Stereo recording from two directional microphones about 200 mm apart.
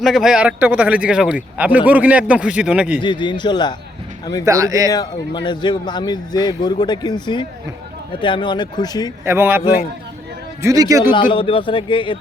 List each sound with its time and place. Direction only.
0.0 s a man's voice: centre (ahead or behind)
3.0 s a man's voice: 25° left (ahead or behind)
4.4 s a man's voice: 15° right (ahead or behind)
4.9 s a man's voice: 20° left (ahead or behind)
9.2 s a man's voice: 10° right (ahead or behind)
11.1 s a man's voice: 25° left (ahead or behind)